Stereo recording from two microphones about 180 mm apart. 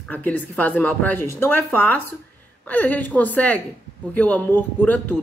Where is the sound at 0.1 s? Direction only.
10° left (ahead or behind).